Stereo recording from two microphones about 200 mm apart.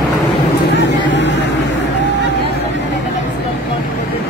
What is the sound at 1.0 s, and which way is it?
Vehicle, 65° left (ahead or behind).